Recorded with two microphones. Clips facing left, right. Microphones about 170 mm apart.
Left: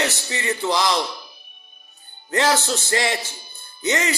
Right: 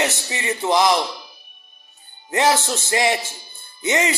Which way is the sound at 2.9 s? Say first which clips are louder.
Right 4 dB; 20° right (ahead or behind).